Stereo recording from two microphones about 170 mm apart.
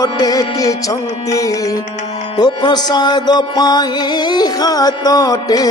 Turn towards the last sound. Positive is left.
turn(degrees=20)  # may be behind; listen again after turning